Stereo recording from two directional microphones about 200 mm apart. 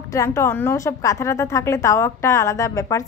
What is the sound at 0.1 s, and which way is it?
A woman's voice, 15° left (ahead or behind).